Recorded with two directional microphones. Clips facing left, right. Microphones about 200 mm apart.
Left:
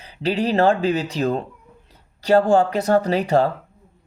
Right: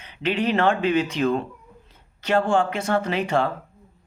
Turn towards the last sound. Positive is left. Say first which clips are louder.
# left 4 dB
turn(degrees=40)  # may be behind; listen again after turning